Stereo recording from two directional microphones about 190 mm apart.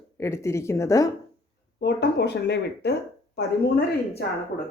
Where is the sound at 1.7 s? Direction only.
60° left (ahead or behind).